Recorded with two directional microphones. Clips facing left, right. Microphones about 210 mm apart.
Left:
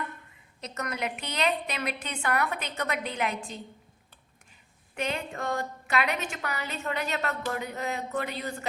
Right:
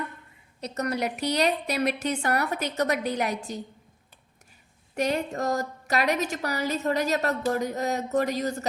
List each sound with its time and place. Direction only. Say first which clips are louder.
0.6 s a woman's voice: right 5 dB; 35° right (ahead or behind)
4.9 s a woman's voice: right 6 dB; 40° right (ahead or behind)